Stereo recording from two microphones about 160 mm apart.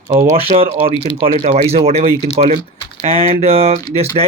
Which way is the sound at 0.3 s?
35° right (ahead or behind).